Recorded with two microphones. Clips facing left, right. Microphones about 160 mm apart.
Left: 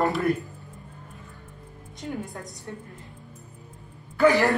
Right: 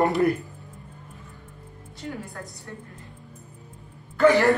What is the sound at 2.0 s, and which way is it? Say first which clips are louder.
Speech: left 2 dB; 20° left (ahead or behind).